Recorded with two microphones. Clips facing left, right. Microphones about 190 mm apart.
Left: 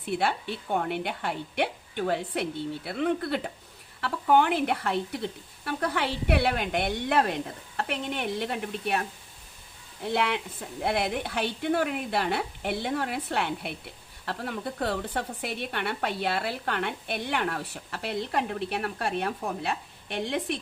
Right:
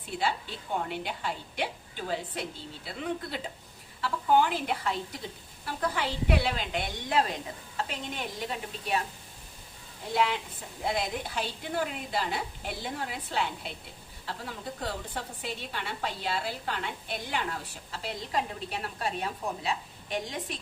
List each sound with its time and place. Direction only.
0.0 s a woman's voice: 65° left (ahead or behind)
10.1 s a woman's voice: 65° left (ahead or behind)